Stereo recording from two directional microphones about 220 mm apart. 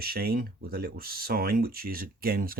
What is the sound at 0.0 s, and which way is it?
Speech, 45° right (ahead or behind).